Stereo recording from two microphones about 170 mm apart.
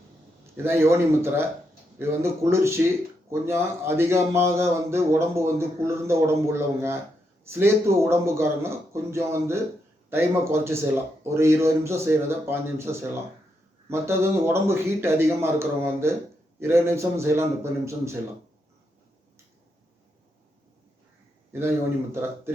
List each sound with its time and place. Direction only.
0.5 s speech: 15° right (ahead or behind)
21.5 s speech: 15° right (ahead or behind)